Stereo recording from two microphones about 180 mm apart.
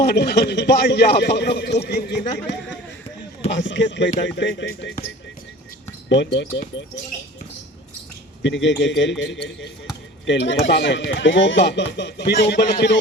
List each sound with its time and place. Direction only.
0.0 s a man's voice: 65° left (ahead or behind)
3.6 s a man's voice: 90° left
6.1 s speech: 80° left
8.4 s a man's voice: 85° left; by 13.0 s 70° left (ahead or behind)